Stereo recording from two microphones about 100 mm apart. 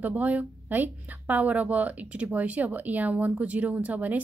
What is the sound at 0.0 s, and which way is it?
Speech, 15° right (ahead or behind).